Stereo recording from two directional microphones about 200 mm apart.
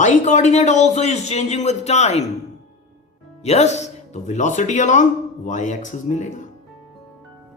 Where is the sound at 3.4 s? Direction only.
35° left (ahead or behind).